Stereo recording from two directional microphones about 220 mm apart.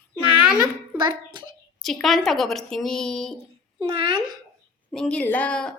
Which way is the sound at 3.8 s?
25° right (ahead or behind).